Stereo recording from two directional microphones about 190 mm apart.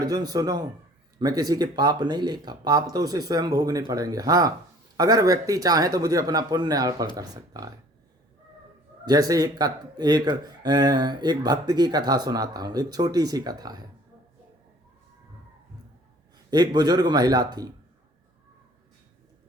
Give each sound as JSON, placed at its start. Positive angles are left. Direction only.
{"t": 0.0, "sound": "speech", "side_deg": -20}
{"t": 9.0, "sound": "speech", "side_deg": -20}
{"t": 16.5, "sound": "speech", "side_deg": -20}